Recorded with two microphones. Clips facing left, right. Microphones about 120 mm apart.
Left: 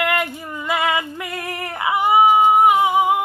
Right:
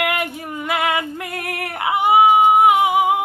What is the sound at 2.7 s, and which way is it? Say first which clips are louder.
Singing: even; 20° right (ahead or behind).